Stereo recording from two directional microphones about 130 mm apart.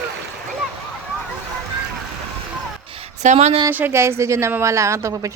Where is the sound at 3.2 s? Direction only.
60° right (ahead or behind).